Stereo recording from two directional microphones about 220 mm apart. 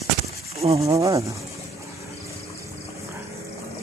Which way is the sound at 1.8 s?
15° right (ahead or behind).